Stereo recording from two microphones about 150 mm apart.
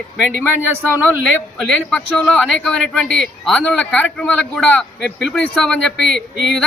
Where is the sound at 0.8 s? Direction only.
15° right (ahead or behind).